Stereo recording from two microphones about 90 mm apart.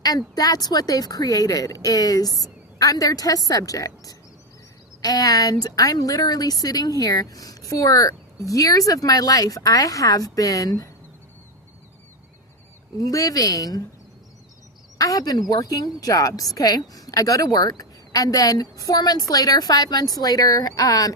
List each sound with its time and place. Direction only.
0.0 s a woman's voice: 45° left (ahead or behind)
13.0 s a woman's voice: 40° left (ahead or behind)
14.9 s a woman's voice: 45° left (ahead or behind)